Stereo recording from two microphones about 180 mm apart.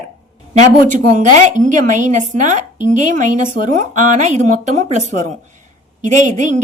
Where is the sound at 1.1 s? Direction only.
45° right (ahead or behind).